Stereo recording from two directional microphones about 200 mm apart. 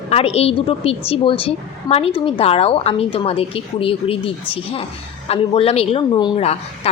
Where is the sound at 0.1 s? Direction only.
30° left (ahead or behind).